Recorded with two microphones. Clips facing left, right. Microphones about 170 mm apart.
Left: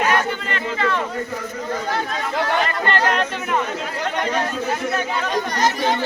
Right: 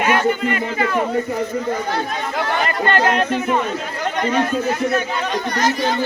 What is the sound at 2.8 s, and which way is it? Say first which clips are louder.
Speech: right 6 dB; 15° right (ahead or behind).